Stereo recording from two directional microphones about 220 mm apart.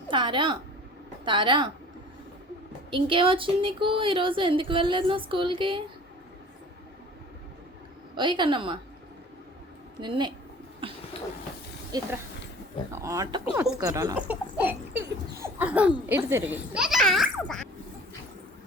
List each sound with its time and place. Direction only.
0.1 s speech: 20° right (ahead or behind)
2.9 s speech: 25° right (ahead or behind)
8.1 s speech: 20° right (ahead or behind)
10.0 s speech: 20° right (ahead or behind)
10.8 s cough: 25° right (ahead or behind)
11.9 s speech: 15° right (ahead or behind); by 17.7 s centre (ahead or behind)